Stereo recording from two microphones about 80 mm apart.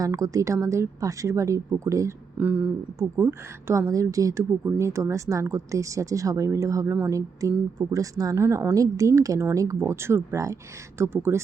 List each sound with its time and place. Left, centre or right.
0.0 s speech: right
2.4 s speech: right
3.2 s speech: right
3.8 s a woman's voice: right
9.8 s speech: right